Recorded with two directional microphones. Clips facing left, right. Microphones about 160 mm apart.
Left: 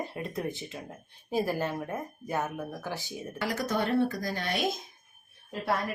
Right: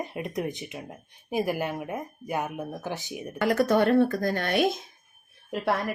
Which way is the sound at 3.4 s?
55° right (ahead or behind).